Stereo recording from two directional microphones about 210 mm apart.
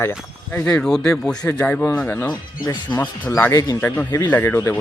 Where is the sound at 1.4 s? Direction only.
15° left (ahead or behind).